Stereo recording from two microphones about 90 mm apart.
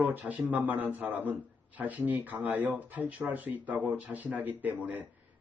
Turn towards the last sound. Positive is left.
turn(degrees=-15)  # may be behind; listen again after turning